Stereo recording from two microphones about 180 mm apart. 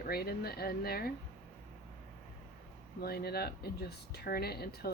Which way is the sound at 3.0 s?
60° left (ahead or behind).